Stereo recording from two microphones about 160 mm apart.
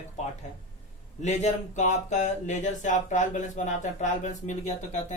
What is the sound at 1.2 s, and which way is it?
Speech, 45° left (ahead or behind).